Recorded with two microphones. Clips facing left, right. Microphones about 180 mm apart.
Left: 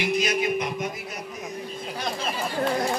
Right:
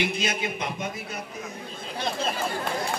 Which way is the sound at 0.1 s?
25° right (ahead or behind).